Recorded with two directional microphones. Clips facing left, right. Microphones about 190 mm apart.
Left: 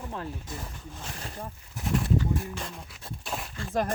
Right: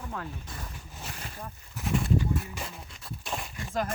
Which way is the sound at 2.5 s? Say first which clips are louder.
Left 2 dB; 5° right (ahead or behind).